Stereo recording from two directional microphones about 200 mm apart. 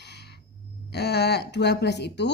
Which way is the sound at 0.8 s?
55° left (ahead or behind).